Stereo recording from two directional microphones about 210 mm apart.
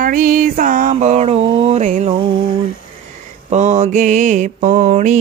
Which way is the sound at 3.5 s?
35° right (ahead or behind).